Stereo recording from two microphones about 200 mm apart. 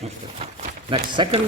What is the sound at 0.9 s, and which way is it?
Speech, 25° right (ahead or behind).